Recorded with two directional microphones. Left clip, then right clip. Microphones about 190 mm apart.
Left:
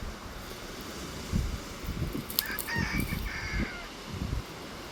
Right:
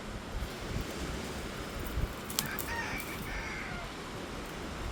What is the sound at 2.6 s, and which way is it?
Fowl, 55° right (ahead or behind).